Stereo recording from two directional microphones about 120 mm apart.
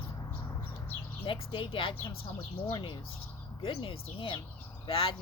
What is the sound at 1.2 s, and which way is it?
Speech, 45° left (ahead or behind).